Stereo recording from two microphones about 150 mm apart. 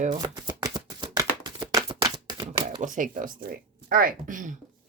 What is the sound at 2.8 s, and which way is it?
Speech, 60° right (ahead or behind).